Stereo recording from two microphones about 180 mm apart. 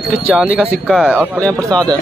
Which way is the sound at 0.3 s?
5° left (ahead or behind).